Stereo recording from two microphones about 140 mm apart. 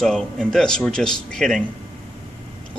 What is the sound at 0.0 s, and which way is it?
Speech, 5° left (ahead or behind).